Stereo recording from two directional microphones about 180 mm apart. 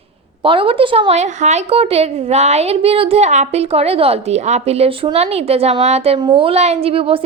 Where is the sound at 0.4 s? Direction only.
30° right (ahead or behind).